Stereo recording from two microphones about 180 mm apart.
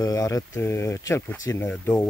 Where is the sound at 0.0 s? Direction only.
20° left (ahead or behind).